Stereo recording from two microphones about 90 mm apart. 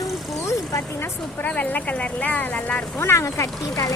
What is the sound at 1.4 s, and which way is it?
Speech, 15° left (ahead or behind).